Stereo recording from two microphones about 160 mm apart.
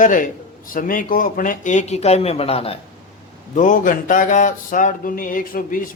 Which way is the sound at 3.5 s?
55° left (ahead or behind).